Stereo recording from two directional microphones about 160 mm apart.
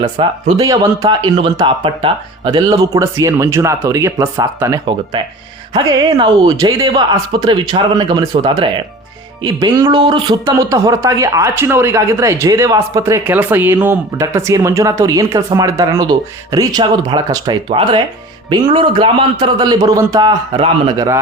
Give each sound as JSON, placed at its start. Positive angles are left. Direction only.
{"t": 0.0, "sound": "speech", "side_deg": -30}
{"t": 1.0, "sound": "speech", "side_deg": -35}
{"t": 5.2, "sound": "speech", "side_deg": -30}
{"t": 10.4, "sound": "speech", "side_deg": -20}